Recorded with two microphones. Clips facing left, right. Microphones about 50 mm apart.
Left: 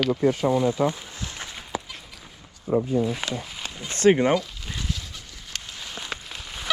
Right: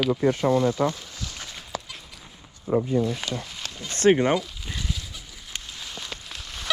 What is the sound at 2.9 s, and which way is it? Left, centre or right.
Speech, centre.